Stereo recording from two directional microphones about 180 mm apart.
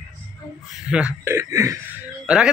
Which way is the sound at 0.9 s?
5° right (ahead or behind).